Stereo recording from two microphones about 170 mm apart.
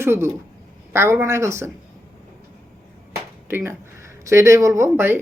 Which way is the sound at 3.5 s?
15° right (ahead or behind).